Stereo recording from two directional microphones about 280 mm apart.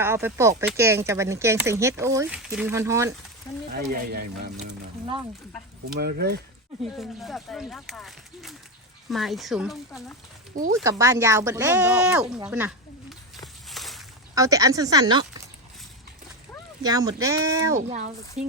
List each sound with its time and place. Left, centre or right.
0.0 s speech: centre
3.7 s speech: right
5.9 s speech: right
6.9 s speech: centre
10.8 s speech: centre
12.4 s snake: centre
14.3 s speech: centre
16.8 s speech: centre
17.7 s speech: right